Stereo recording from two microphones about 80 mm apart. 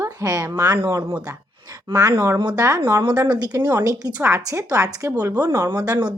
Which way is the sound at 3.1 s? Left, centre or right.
Right.